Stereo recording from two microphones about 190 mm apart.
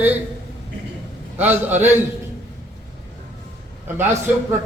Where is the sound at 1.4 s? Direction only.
10° right (ahead or behind).